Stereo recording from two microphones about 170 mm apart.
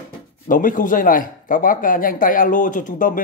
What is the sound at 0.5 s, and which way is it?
A man's voice, 50° left (ahead or behind).